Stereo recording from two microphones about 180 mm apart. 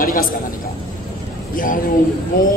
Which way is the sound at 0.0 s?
50° left (ahead or behind).